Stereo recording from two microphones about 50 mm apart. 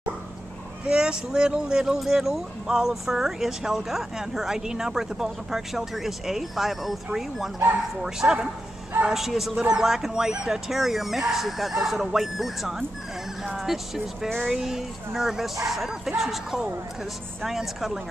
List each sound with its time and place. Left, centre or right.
0.8 s speech: centre